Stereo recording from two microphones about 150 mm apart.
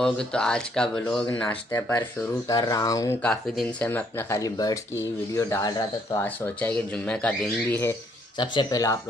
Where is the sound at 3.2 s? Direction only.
10° left (ahead or behind); by 6.2 s 25° left (ahead or behind).